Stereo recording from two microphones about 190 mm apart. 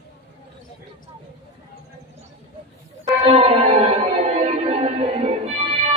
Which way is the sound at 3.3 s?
30° right (ahead or behind).